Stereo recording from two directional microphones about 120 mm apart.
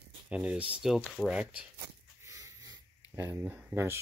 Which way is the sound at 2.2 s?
25° right (ahead or behind).